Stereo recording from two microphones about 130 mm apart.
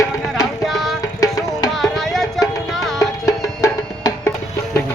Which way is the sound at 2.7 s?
Centre (ahead or behind).